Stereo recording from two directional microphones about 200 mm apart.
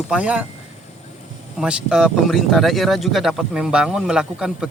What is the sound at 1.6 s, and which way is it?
Speech, 5° right (ahead or behind).